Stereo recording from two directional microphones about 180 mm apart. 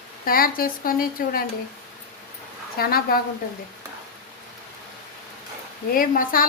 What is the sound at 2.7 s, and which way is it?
Speech, 55° left (ahead or behind).